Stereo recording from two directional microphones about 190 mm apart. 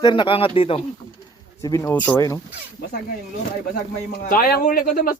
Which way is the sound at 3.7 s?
45° left (ahead or behind).